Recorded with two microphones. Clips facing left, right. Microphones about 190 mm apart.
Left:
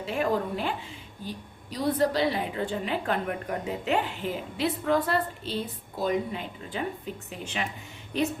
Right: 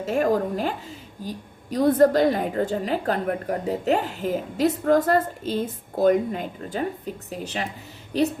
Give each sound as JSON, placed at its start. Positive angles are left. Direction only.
{"t": 0.0, "sound": "a woman's voice", "side_deg": -45}